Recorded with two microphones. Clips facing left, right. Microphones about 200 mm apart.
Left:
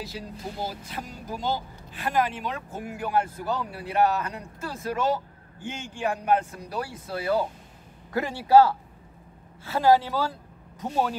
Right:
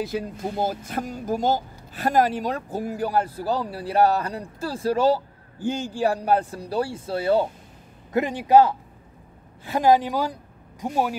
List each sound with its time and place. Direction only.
0.0 s a man's voice: 55° right (ahead or behind); by 11.1 s 10° right (ahead or behind)